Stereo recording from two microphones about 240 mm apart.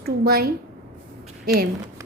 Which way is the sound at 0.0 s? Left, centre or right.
Right.